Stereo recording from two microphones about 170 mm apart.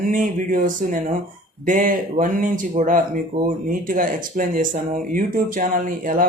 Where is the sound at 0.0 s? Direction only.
50° right (ahead or behind).